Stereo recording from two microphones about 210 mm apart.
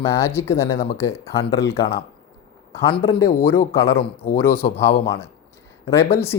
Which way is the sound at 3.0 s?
15° left (ahead or behind).